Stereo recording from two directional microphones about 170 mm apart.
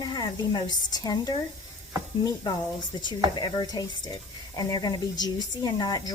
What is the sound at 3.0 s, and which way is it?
A woman's voice, 25° left (ahead or behind).